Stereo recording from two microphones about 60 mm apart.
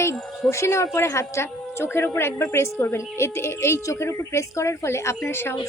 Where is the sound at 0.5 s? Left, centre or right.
Left.